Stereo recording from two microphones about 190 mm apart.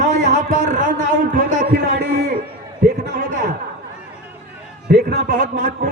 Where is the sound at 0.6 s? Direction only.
45° right (ahead or behind).